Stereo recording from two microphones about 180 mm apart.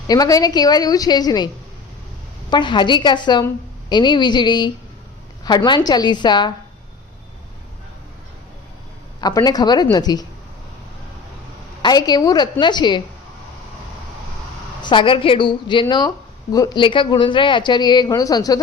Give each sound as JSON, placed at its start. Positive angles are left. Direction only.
{"t": 0.1, "sound": "a woman's voice", "side_deg": 20}
{"t": 2.5, "sound": "a woman's voice", "side_deg": 25}
{"t": 9.2, "sound": "a woman's voice", "side_deg": 20}
{"t": 11.8, "sound": "a woman's voice", "side_deg": 25}
{"t": 14.8, "sound": "a woman's voice", "side_deg": 25}